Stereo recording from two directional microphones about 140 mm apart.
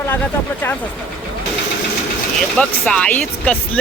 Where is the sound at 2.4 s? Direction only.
5° left (ahead or behind).